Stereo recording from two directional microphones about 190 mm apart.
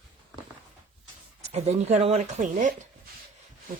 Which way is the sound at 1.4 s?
35° right (ahead or behind).